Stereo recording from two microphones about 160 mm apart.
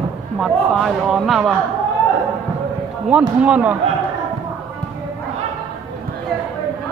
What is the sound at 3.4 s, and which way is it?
Speech, 5° right (ahead or behind).